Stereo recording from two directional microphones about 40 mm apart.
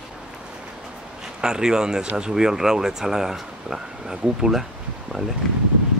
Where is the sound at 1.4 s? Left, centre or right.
Centre.